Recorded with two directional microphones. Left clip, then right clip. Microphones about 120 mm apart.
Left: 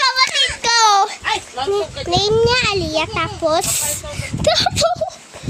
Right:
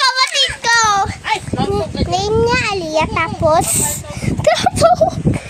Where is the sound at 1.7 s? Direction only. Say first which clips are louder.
Left 2 dB; 20° left (ahead or behind).